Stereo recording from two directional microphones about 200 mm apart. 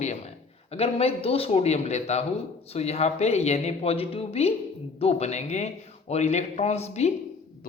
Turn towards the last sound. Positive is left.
turn(degrees=35)  # may be behind; listen again after turning